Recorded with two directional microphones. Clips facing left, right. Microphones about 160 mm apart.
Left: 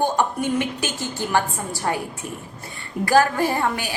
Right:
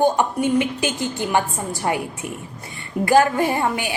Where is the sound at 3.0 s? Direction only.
20° right (ahead or behind).